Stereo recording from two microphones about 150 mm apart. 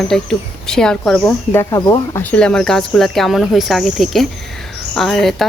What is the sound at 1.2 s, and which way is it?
Speech, 15° left (ahead or behind).